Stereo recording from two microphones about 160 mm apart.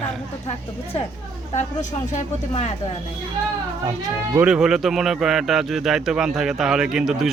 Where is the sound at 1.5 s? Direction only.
45° left (ahead or behind).